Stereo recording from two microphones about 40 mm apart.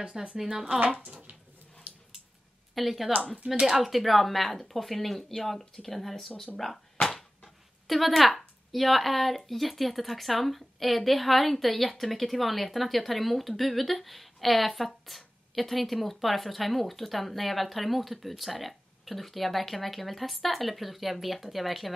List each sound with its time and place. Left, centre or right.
0.0 s speech: right
0.4 s speech: centre
1.9 s a sound: right
2.7 s speech: centre
6.6 s a sound: centre
7.4 s speech: centre